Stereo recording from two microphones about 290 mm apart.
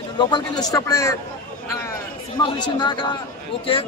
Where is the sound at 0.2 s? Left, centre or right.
Centre.